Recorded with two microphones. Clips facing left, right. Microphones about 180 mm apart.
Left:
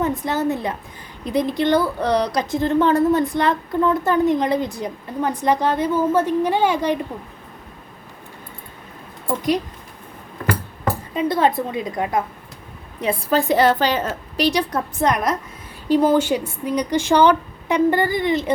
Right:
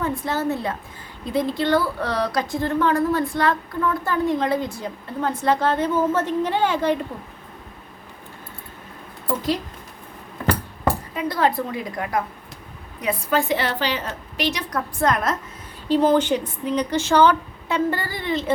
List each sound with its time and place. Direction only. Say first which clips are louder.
0.0 s speech: left 3 dB; 20° left (ahead or behind)
11.1 s speech: left 6 dB; 25° left (ahead or behind)
13.0 s a woman's voice: left 3 dB; 30° left (ahead or behind); by 18.5 s 15° left (ahead or behind)